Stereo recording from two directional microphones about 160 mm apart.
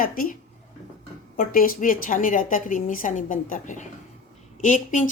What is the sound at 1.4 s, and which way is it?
A woman's voice, 60° left (ahead or behind).